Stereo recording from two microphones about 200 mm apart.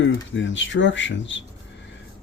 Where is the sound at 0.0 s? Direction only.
65° left (ahead or behind).